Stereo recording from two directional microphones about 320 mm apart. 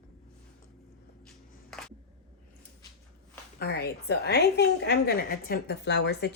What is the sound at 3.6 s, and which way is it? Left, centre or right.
A woman's voice, left.